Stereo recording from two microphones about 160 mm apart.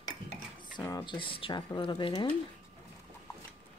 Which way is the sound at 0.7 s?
25° left (ahead or behind).